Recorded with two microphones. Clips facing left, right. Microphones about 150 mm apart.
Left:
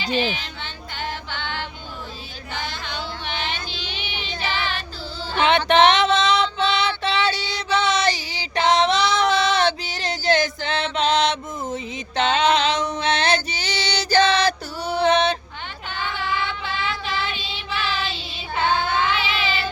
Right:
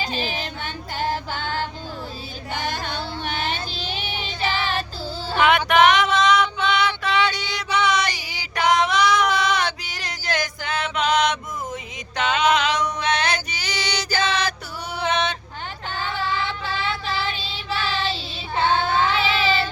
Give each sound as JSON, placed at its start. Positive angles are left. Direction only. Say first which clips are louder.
{"t": 0.0, "sound": "female singing", "louder": "left 3 dB", "side_deg": -40}
{"t": 2.5, "sound": "child singing", "louder": "right 4 dB", "side_deg": -45}
{"t": 5.4, "sound": "music", "louder": "even", "side_deg": 25}
{"t": 7.7, "sound": "female singing", "louder": "left 1 dB", "side_deg": 25}
{"t": 16.6, "sound": "child singing", "louder": "right 1 dB", "side_deg": -35}